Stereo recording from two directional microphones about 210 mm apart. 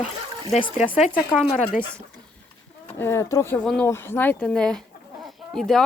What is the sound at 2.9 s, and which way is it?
Speech, 10° left (ahead or behind).